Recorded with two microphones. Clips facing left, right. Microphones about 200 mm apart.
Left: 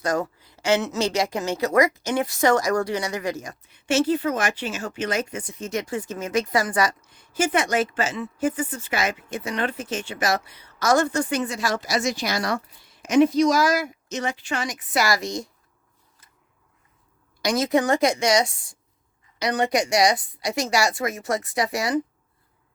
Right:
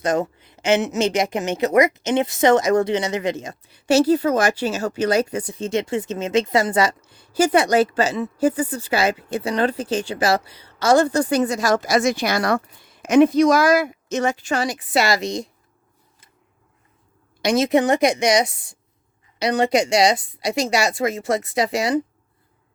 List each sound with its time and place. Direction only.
0.0 s a woman's voice: 20° right (ahead or behind)
17.4 s a woman's voice: 25° right (ahead or behind)